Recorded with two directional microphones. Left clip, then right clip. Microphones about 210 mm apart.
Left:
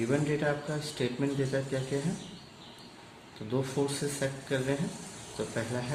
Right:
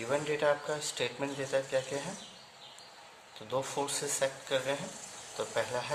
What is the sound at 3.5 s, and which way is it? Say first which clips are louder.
Speech: left 2 dB; 40° right (ahead or behind).